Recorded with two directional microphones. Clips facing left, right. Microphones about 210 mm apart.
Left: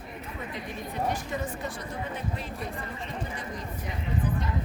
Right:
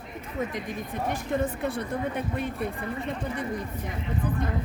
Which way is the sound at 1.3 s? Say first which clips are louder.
Right 6 dB; 55° right (ahead or behind).